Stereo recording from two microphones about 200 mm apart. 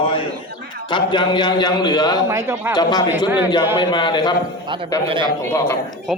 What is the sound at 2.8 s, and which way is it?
A man's voice, 20° left (ahead or behind).